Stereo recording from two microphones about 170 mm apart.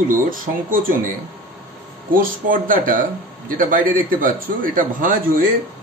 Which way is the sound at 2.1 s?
55° right (ahead or behind).